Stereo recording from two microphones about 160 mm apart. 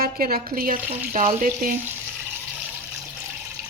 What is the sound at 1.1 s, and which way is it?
Speech, 55° right (ahead or behind).